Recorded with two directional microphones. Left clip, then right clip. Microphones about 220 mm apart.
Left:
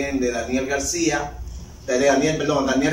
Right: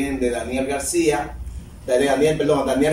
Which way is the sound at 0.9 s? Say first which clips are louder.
Right 3 dB; 15° right (ahead or behind).